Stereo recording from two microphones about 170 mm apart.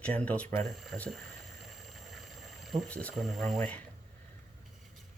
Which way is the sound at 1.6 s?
Centre (ahead or behind).